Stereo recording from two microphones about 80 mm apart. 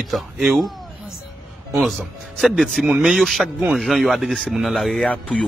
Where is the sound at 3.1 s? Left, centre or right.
Centre.